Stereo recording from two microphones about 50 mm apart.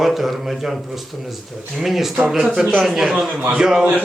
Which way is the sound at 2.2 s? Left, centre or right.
Centre.